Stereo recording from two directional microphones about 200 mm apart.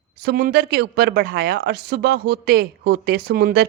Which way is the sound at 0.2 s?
50° right (ahead or behind).